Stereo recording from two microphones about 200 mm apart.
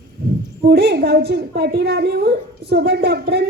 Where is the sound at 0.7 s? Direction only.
55° right (ahead or behind).